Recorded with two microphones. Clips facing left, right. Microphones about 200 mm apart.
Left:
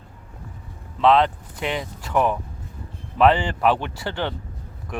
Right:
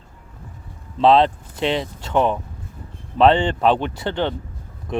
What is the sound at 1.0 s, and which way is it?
Speech, 30° right (ahead or behind).